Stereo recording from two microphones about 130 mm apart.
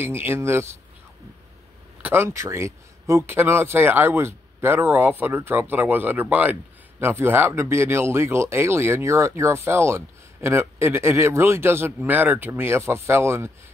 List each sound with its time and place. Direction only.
0.0 s speech: 15° right (ahead or behind)
2.0 s speech: 15° right (ahead or behind)